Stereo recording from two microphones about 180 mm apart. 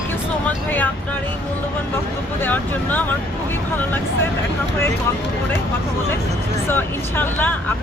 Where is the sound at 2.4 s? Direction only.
10° left (ahead or behind).